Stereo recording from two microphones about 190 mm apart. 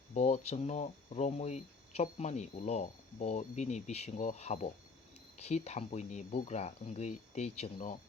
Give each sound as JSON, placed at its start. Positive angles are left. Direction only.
{"t": 0.1, "sound": "speech", "side_deg": 35}